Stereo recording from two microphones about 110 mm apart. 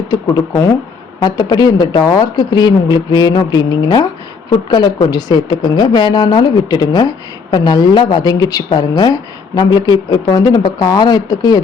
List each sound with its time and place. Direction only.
0.1 s speech: 30° left (ahead or behind)